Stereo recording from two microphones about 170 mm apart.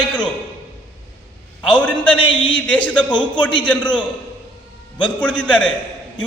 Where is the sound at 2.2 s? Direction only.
30° left (ahead or behind).